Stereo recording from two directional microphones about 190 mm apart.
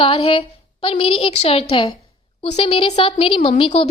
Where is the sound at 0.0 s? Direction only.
25° left (ahead or behind).